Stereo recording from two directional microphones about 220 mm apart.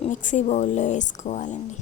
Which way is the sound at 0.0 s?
35° left (ahead or behind).